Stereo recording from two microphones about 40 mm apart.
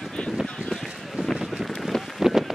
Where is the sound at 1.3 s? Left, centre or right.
Centre.